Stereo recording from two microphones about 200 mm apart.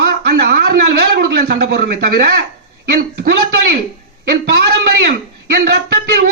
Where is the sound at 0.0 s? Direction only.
55° right (ahead or behind).